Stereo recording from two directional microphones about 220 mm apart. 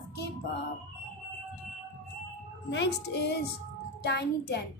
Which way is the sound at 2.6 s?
50° left (ahead or behind).